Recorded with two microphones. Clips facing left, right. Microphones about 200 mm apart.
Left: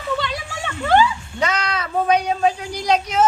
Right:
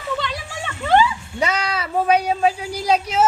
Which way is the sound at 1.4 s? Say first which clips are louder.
Even; 10° right (ahead or behind).